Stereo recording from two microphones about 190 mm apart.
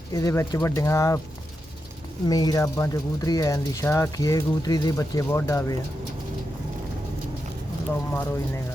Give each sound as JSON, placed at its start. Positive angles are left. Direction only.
{"t": 0.1, "sound": "speech", "side_deg": 20}
{"t": 2.2, "sound": "speech", "side_deg": 20}
{"t": 7.9, "sound": "speech", "side_deg": 10}